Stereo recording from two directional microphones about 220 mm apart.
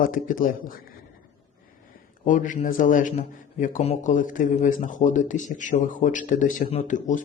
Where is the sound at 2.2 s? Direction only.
35° left (ahead or behind).